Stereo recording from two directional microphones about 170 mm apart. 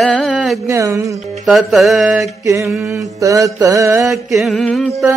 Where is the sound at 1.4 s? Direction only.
Centre (ahead or behind).